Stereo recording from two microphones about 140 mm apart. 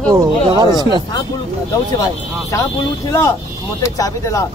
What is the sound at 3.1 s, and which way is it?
Speech, 25° left (ahead or behind).